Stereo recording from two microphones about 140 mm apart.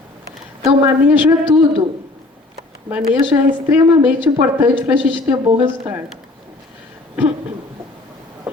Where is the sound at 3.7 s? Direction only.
10° right (ahead or behind).